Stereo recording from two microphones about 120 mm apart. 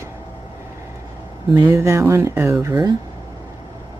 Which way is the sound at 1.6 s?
25° right (ahead or behind).